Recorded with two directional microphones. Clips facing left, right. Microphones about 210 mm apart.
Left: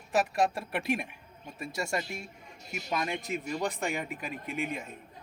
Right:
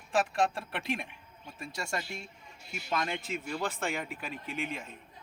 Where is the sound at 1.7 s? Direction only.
20° left (ahead or behind).